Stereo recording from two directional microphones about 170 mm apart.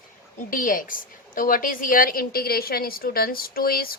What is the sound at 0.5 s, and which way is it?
A woman's voice, 55° left (ahead or behind).